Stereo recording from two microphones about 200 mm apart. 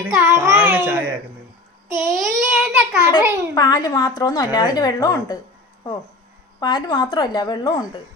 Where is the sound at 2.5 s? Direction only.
10° right (ahead or behind).